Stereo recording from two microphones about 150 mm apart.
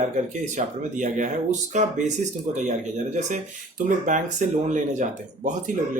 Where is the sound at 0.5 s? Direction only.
55° right (ahead or behind).